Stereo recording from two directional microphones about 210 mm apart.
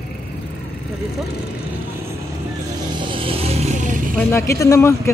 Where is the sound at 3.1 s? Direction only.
25° right (ahead or behind).